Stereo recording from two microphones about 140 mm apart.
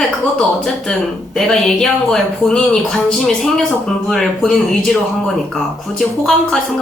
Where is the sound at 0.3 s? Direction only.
5° left (ahead or behind).